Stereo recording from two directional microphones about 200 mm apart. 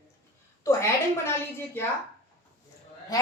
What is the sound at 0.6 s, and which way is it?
Speech, 15° left (ahead or behind).